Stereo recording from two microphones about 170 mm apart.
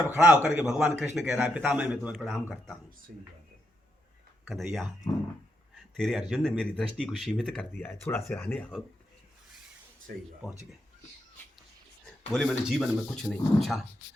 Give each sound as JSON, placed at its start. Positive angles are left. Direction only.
{"t": 0.0, "sound": "a man's voice", "side_deg": -10}
{"t": 2.1, "sound": "speech", "side_deg": 0}
{"t": 3.1, "sound": "speech", "side_deg": -65}
{"t": 4.4, "sound": "speech", "side_deg": 0}
{"t": 6.0, "sound": "speech", "side_deg": 0}
{"t": 12.3, "sound": "speech", "side_deg": 0}